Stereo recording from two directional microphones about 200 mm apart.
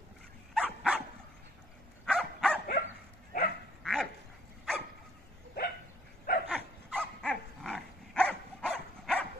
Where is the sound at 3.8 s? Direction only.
Centre (ahead or behind).